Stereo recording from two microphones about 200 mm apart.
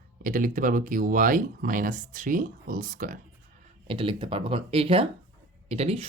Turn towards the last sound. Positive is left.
turn(degrees=-30)  # may be behind; listen again after turning